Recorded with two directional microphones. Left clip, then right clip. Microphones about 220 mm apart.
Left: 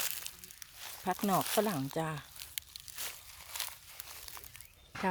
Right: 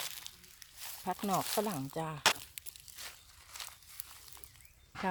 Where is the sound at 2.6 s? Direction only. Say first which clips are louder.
Left 6 dB; centre (ahead or behind).